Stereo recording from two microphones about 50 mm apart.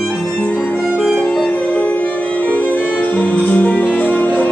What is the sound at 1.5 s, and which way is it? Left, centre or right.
Music, left.